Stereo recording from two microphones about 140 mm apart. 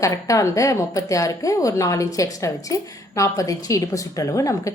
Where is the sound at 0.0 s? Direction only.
25° left (ahead or behind).